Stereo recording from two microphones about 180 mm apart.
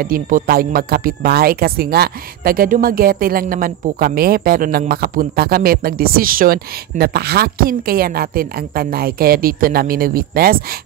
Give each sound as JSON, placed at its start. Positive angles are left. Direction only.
{"t": 0.0, "sound": "speech", "side_deg": -55}